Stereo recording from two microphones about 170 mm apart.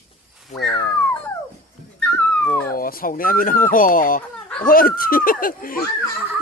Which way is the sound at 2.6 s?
60° left (ahead or behind).